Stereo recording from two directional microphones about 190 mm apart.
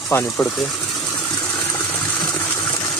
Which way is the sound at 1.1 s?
20° left (ahead or behind).